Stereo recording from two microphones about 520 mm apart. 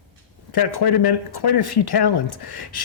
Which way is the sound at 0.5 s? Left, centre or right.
Left.